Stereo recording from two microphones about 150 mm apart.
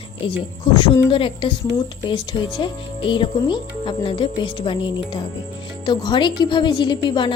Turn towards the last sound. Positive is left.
turn(degrees=30)  # may be behind; listen again after turning